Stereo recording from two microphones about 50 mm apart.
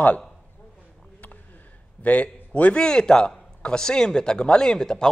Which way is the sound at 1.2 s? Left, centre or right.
Left.